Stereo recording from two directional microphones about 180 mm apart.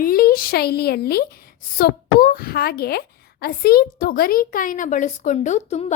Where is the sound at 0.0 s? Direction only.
55° left (ahead or behind).